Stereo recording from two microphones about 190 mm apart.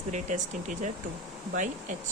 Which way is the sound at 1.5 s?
40° right (ahead or behind).